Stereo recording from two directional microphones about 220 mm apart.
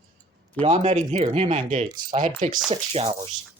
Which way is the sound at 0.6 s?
30° right (ahead or behind).